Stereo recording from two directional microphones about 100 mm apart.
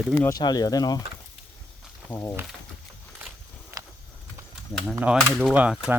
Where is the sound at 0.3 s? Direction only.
40° left (ahead or behind).